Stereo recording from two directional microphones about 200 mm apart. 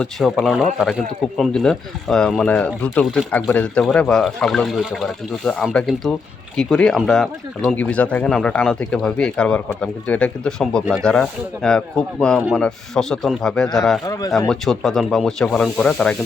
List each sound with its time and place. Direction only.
0.0 s speech: centre (ahead or behind)
14.1 s speech: 15° left (ahead or behind)
14.3 s speech: 5° left (ahead or behind)